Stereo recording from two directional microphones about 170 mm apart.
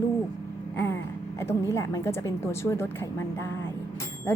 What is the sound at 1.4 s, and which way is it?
A woman's voice, 15° left (ahead or behind).